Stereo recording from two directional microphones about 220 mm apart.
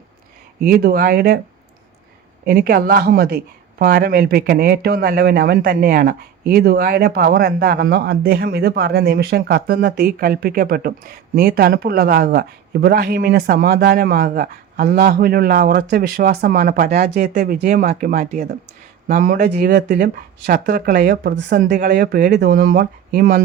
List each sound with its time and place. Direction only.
0.6 s speech: 40° right (ahead or behind)
2.4 s speech: 40° right (ahead or behind)